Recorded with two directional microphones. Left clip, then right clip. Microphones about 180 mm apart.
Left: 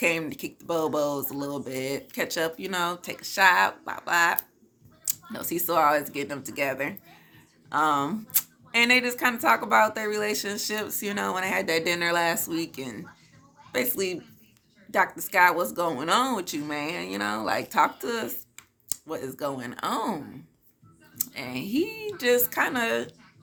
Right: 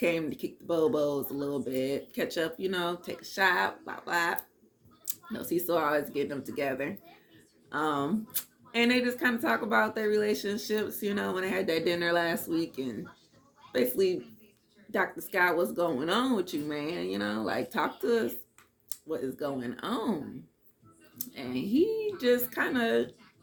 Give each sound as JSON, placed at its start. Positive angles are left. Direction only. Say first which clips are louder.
{"t": 0.0, "sound": "speech", "louder": "left 3 dB", "side_deg": 15}